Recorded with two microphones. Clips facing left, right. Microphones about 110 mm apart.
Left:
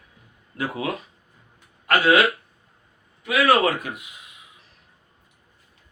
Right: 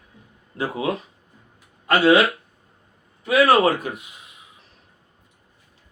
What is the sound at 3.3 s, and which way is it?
Speech, 30° right (ahead or behind).